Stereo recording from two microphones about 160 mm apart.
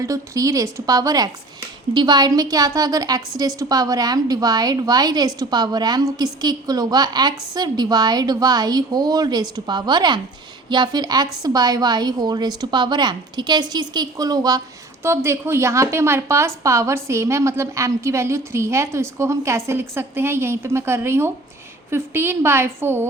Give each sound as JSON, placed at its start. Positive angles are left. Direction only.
{"t": 0.0, "sound": "a woman's voice", "side_deg": -20}